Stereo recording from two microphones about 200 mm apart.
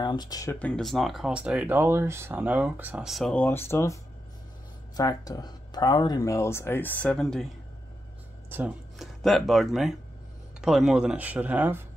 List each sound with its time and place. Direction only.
0.0 s speech: 20° left (ahead or behind)
0.6 s speech: 5° left (ahead or behind)
8.5 s speech: 5° right (ahead or behind)